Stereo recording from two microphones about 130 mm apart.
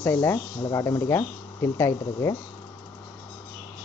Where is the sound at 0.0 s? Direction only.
20° left (ahead or behind).